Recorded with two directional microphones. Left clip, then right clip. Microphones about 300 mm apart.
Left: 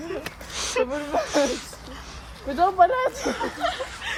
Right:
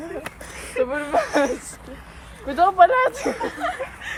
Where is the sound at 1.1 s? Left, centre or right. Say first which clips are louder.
Right 5 dB; right.